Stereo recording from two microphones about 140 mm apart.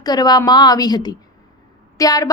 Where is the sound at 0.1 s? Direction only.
30° left (ahead or behind).